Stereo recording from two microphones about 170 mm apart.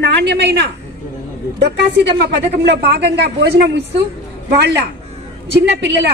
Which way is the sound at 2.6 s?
80° right.